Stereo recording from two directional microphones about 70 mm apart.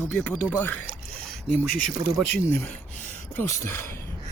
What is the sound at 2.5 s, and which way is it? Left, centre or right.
Speech, left.